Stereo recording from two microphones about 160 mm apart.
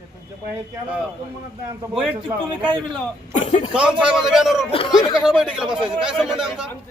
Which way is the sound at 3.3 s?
50° left (ahead or behind).